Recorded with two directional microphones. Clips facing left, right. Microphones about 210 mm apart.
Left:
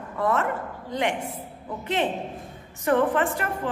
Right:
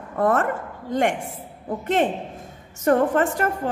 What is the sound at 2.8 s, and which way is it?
Speech, 40° right (ahead or behind).